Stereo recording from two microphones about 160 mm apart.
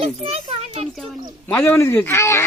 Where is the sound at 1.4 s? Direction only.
10° left (ahead or behind).